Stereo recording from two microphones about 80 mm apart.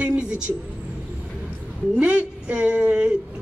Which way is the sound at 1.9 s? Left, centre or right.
Centre.